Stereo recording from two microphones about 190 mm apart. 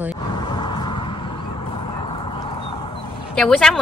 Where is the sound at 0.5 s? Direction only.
25° left (ahead or behind).